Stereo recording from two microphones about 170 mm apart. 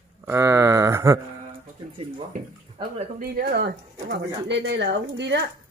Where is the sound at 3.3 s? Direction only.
70° right (ahead or behind); by 5.4 s 90° right.